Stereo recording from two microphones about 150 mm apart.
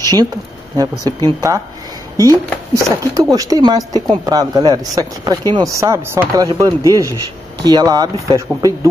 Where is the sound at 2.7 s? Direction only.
25° right (ahead or behind).